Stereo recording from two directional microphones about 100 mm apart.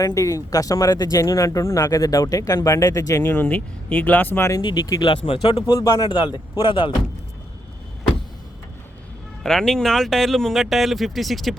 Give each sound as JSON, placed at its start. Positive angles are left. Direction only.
{"t": 0.0, "sound": "speech", "side_deg": 35}
{"t": 3.2, "sound": "speech", "side_deg": 25}
{"t": 4.9, "sound": "speech", "side_deg": 40}
{"t": 5.1, "sound": "speech", "side_deg": 65}
{"t": 9.4, "sound": "speech", "side_deg": 5}